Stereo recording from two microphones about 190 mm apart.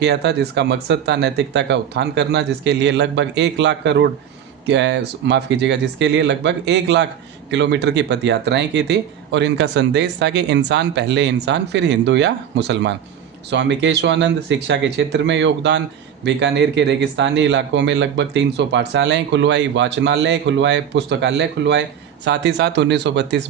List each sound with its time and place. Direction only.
0.0 s a man's voice: 60° right (ahead or behind)